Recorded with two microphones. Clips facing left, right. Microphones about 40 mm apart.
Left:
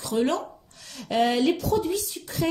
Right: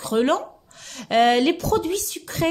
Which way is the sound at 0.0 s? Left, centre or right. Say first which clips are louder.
Right 4 dB; right.